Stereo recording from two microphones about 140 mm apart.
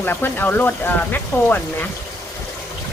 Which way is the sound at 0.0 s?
15° left (ahead or behind).